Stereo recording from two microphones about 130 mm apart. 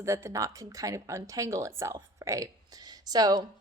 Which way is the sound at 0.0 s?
20° right (ahead or behind).